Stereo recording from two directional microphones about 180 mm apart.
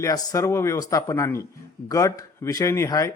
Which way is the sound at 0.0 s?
20° left (ahead or behind).